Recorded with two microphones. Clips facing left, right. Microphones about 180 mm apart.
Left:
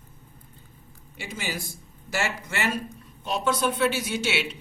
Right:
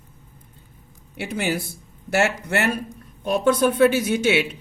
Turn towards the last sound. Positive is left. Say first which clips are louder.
# right 8 dB
turn(degrees=-50)  # may be behind; listen again after turning